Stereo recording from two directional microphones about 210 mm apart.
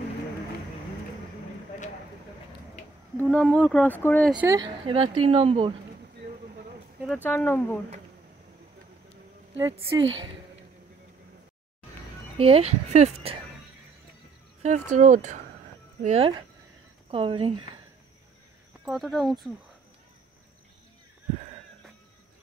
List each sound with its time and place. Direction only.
3.3 s speech: 5° left (ahead or behind)
4.3 s a woman's voice: 5° right (ahead or behind)
4.6 s speech: 25° right (ahead or behind)
7.3 s speech: 10° left (ahead or behind)
9.6 s a woman's voice: 15° right (ahead or behind)
12.4 s speech: 30° right (ahead or behind)
14.6 s speech: 35° right (ahead or behind)
18.9 s speech: centre (ahead or behind)